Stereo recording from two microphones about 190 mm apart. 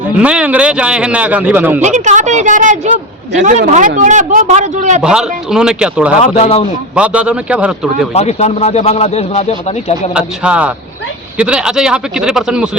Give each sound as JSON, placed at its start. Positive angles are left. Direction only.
{"t": 0.1, "sound": "a man's voice", "side_deg": -5}
{"t": 1.8, "sound": "speech", "side_deg": -40}
{"t": 5.0, "sound": "speech", "side_deg": -5}
{"t": 6.2, "sound": "speech", "side_deg": 30}
{"t": 6.9, "sound": "a man's voice", "side_deg": -5}
{"t": 8.1, "sound": "speech", "side_deg": 35}
{"t": 10.2, "sound": "a man's voice", "side_deg": -5}